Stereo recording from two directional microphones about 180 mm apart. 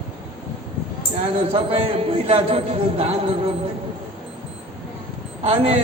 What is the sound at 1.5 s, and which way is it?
A man's voice, 30° right (ahead or behind).